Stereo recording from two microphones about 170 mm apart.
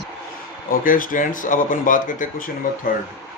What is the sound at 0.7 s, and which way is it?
Speech, 55° left (ahead or behind).